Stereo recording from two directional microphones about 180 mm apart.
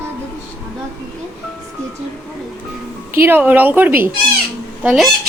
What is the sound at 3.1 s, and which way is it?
A woman's voice, 10° right (ahead or behind).